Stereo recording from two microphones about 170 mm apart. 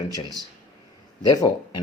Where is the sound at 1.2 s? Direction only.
25° left (ahead or behind).